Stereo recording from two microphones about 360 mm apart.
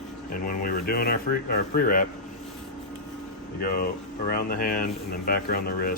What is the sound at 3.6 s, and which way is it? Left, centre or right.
Speech, left.